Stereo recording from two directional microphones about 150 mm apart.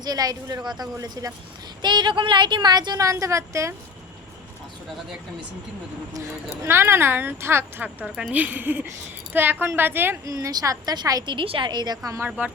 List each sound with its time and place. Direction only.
0.0 s a woman's voice: 25° right (ahead or behind)
6.1 s speech: 20° right (ahead or behind)
10.3 s a woman's voice: 25° right (ahead or behind)